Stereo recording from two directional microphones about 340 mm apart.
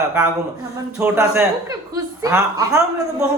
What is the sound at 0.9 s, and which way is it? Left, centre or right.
Speech, centre.